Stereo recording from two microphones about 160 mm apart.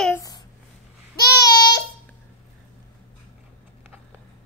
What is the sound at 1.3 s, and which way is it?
Child singing, 25° left (ahead or behind).